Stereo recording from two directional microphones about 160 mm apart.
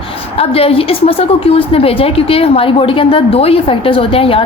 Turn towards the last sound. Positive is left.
turn(degrees=35)  # may be behind; listen again after turning